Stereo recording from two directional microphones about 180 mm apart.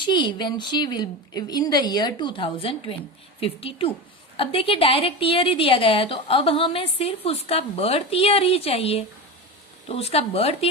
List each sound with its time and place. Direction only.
0.0 s a woman's voice: 25° left (ahead or behind)